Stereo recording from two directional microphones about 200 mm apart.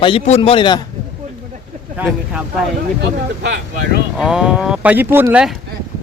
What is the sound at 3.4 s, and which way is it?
Speech, 50° right (ahead or behind).